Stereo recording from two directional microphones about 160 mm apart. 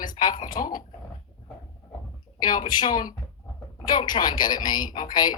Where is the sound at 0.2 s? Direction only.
30° left (ahead or behind).